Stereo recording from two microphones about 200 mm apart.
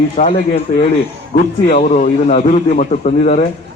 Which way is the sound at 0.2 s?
30° left (ahead or behind).